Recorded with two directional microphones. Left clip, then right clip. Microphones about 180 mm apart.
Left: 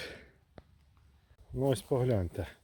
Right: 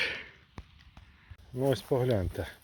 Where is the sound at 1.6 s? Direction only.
15° left (ahead or behind).